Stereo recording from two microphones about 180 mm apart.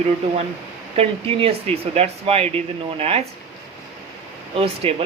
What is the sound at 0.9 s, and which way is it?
Speech, 35° right (ahead or behind).